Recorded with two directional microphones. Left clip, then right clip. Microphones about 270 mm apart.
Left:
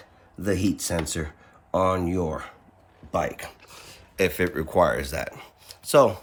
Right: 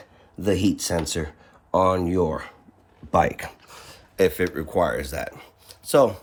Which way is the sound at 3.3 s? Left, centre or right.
Right.